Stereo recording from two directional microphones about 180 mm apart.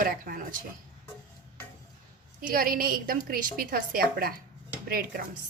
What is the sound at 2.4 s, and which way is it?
A woman's voice, 50° right (ahead or behind).